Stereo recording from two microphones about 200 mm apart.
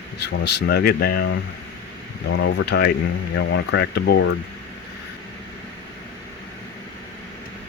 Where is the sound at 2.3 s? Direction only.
70° left (ahead or behind).